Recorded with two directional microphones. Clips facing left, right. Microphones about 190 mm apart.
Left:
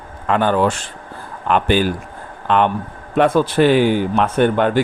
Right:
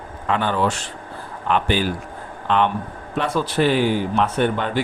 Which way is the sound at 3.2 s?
55° left (ahead or behind).